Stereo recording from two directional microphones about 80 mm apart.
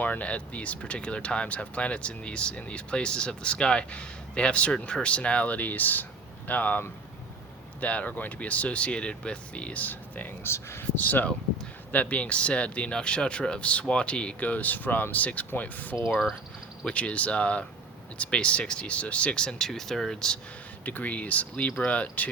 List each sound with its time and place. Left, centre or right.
0.0 s speech: centre
16.0 s speech: centre
16.8 s speech: centre
20.8 s speech: centre